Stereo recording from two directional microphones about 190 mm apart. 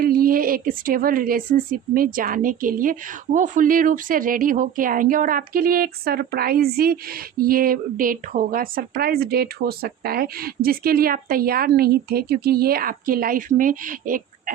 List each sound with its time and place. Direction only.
0.0 s a woman's voice: 50° right (ahead or behind)